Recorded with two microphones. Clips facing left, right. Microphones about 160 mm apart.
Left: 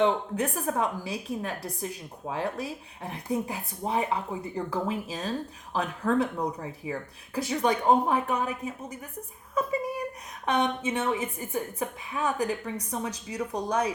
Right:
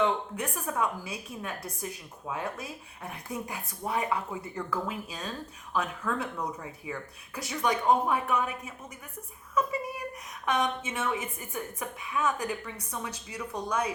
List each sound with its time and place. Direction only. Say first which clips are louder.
0.0 s speech: left 4 dB; 40° left (ahead or behind)
10.4 s speech: left 3 dB; 30° left (ahead or behind)